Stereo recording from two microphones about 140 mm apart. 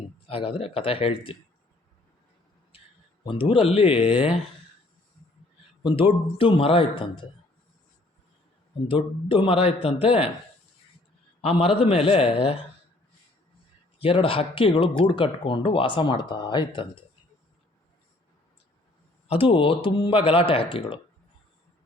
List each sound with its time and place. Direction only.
0.3 s speech: 40° left (ahead or behind)
3.2 s speech: 40° left (ahead or behind)
6.3 s speech: 40° left (ahead or behind)
8.9 s a man's voice: 40° left (ahead or behind)
11.4 s a man's voice: 45° left (ahead or behind)
14.0 s speech: 40° left (ahead or behind)
19.3 s speech: 40° left (ahead or behind)